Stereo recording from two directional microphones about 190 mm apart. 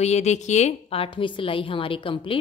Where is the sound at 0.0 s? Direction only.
35° left (ahead or behind).